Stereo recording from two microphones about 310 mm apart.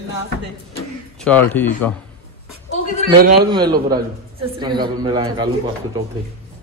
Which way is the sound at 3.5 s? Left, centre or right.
Centre.